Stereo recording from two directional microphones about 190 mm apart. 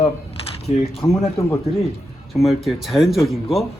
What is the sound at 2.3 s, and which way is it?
Speech, centre (ahead or behind).